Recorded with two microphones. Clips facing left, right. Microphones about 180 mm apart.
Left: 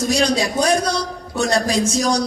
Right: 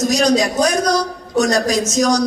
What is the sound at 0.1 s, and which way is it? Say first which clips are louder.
A man's voice: right 1 dB; 30° left (ahead or behind).